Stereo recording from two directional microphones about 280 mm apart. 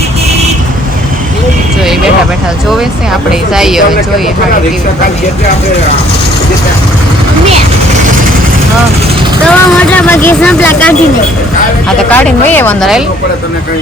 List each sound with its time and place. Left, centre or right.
3.5 s speech: centre
9.4 s speech: centre
12.0 s speech: centre